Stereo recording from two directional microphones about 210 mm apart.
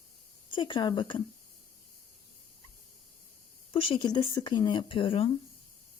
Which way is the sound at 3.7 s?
25° left (ahead or behind).